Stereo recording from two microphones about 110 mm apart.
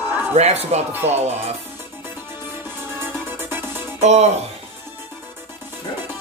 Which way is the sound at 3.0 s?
20° right (ahead or behind).